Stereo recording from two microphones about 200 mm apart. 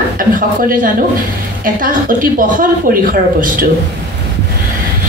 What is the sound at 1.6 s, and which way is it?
Speech, 45° right (ahead or behind).